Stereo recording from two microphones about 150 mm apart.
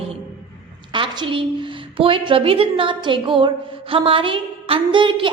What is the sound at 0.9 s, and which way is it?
A woman's voice, 35° right (ahead or behind).